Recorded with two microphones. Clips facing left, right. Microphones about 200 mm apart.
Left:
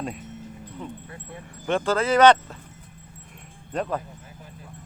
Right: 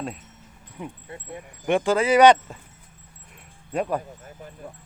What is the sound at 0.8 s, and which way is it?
Speech, 10° right (ahead or behind).